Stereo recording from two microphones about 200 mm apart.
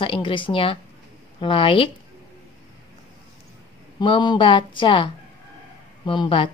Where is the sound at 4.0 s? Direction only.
25° left (ahead or behind).